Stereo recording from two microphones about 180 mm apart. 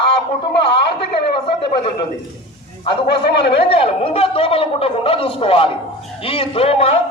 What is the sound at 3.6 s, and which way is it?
A man's voice, 30° left (ahead or behind).